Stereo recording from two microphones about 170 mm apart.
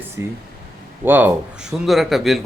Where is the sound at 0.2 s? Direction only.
15° right (ahead or behind).